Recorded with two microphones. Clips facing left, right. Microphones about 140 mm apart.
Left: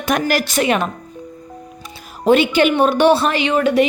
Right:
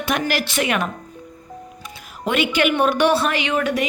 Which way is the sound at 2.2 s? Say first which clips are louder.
Left 6 dB; 30° left (ahead or behind).